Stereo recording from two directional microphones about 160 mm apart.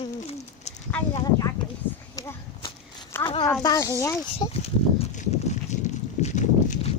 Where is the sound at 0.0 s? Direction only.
40° left (ahead or behind).